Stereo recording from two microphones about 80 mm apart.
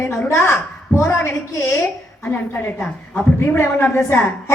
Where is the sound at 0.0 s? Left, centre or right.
Left.